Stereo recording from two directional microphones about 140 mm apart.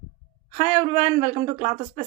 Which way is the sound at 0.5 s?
50° left (ahead or behind).